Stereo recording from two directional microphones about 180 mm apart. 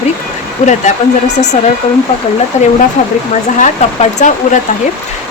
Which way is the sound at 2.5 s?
40° left (ahead or behind).